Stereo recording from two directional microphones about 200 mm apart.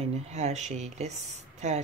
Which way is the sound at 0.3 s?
35° right (ahead or behind).